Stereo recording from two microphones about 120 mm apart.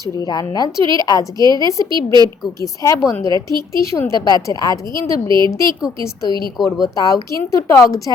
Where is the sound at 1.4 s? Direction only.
35° right (ahead or behind).